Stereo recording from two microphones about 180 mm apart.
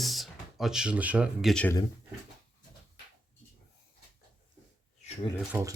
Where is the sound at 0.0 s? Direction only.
Centre (ahead or behind).